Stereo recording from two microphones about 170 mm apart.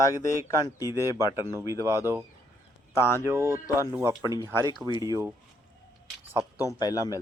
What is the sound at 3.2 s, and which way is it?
Speech, 15° right (ahead or behind).